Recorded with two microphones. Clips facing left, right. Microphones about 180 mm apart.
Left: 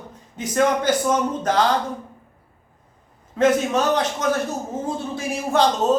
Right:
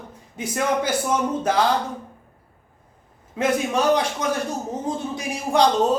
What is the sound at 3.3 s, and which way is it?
Speech, 10° right (ahead or behind).